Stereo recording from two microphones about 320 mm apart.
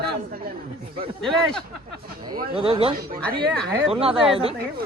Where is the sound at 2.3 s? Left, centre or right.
Centre.